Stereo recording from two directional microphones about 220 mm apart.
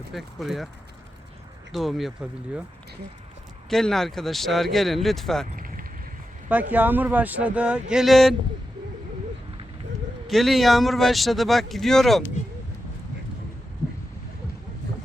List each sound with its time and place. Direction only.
0.1 s speech: centre (ahead or behind)
1.7 s speech: centre (ahead or behind)
3.7 s speech: centre (ahead or behind)
5.5 s vehicle: 40° right (ahead or behind)
6.5 s speech: 5° right (ahead or behind)
10.2 s speech: centre (ahead or behind)